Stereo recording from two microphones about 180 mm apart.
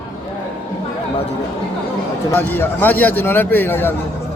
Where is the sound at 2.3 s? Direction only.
10° left (ahead or behind).